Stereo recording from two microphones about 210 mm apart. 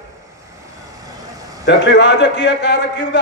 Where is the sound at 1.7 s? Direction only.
55° left (ahead or behind).